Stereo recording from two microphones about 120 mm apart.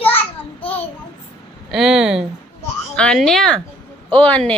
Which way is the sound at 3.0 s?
5° left (ahead or behind).